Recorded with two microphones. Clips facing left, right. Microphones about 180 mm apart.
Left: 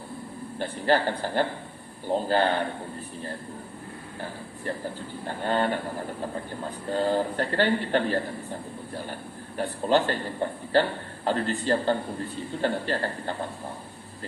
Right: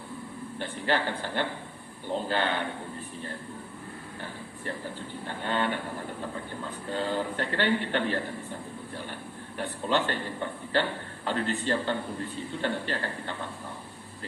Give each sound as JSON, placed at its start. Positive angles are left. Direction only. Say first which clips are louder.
{"t": 0.6, "sound": "a man's voice", "louder": "left 5 dB", "side_deg": 40}
{"t": 5.2, "sound": "a man's voice", "louder": "left 4 dB", "side_deg": 40}
{"t": 9.6, "sound": "a man's voice", "louder": "left 5 dB", "side_deg": 40}